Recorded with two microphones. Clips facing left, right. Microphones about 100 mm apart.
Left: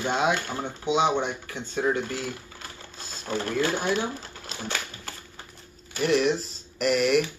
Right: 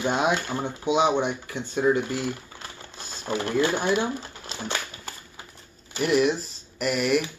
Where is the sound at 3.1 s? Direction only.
20° right (ahead or behind).